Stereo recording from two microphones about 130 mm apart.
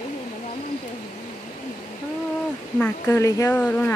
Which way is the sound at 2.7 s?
10° left (ahead or behind).